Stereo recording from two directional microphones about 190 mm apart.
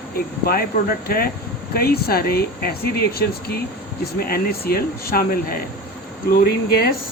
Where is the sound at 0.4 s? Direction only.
50° left (ahead or behind).